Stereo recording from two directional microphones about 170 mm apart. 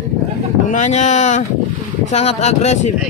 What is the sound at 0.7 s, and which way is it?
Speech, 45° left (ahead or behind).